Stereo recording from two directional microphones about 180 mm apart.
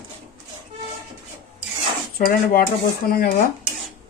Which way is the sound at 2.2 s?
55° left (ahead or behind).